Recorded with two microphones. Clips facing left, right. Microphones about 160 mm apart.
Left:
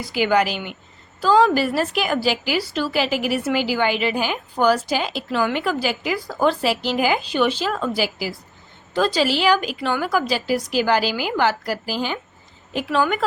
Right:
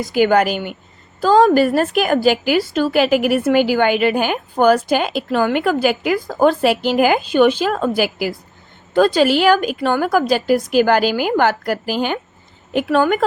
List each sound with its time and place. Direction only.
0.0 s a woman's voice: 50° right (ahead or behind)